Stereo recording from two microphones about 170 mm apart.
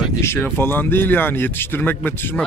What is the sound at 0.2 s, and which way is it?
Speech, 10° left (ahead or behind).